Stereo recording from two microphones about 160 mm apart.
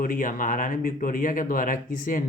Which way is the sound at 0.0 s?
55° left (ahead or behind).